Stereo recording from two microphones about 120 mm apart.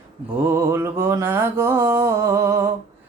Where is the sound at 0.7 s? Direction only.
20° right (ahead or behind).